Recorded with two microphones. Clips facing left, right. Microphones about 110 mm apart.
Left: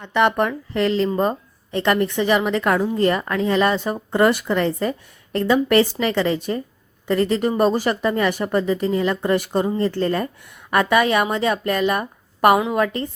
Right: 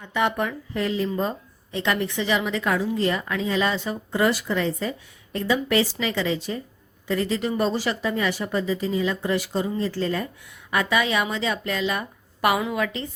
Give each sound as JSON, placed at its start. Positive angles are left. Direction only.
{"t": 0.0, "sound": "speech", "side_deg": 65}